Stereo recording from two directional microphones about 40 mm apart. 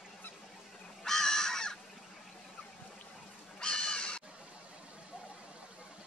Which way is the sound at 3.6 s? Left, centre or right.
Left.